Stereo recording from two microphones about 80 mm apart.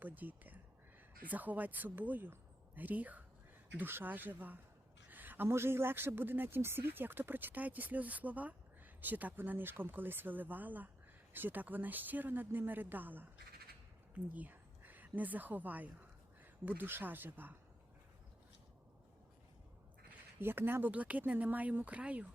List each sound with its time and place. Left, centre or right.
0.0 s a woman's voice: right
20.4 s speech: right